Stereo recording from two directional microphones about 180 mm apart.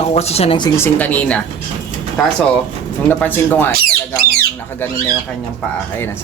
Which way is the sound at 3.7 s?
55° right (ahead or behind).